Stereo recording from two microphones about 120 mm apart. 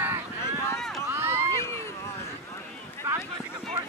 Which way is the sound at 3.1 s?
20° right (ahead or behind).